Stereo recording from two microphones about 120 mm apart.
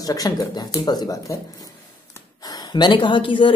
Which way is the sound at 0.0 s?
30° left (ahead or behind).